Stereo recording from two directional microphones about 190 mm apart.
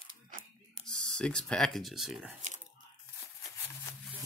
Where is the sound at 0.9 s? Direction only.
5° left (ahead or behind).